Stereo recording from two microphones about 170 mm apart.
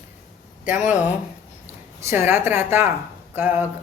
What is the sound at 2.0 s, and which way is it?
A woman's voice, 15° right (ahead or behind).